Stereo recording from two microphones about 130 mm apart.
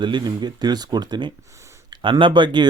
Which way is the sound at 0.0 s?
35° right (ahead or behind).